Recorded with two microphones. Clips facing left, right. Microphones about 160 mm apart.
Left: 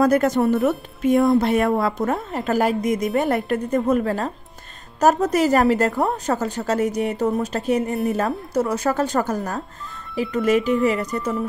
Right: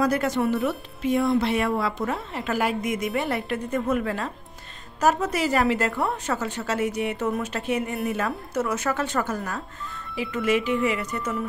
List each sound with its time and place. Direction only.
0.0 s a woman's voice: 45° left (ahead or behind)